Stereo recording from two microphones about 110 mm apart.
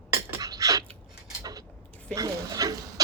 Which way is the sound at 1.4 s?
35° right (ahead or behind).